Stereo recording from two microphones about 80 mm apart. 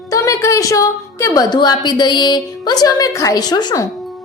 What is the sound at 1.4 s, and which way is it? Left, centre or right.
A woman's voice, left.